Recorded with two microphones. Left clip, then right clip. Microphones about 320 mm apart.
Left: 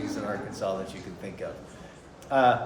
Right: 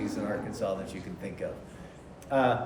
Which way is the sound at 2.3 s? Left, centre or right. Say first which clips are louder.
Left 3 dB; centre.